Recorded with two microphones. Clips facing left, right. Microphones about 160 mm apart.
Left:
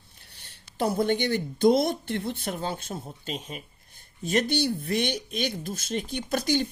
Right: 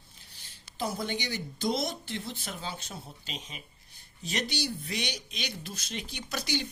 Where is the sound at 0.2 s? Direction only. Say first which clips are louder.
Left 4 dB; 65° left (ahead or behind).